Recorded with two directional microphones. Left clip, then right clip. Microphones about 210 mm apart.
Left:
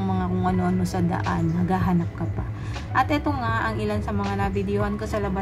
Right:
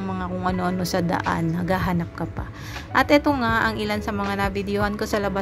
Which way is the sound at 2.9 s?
30° right (ahead or behind).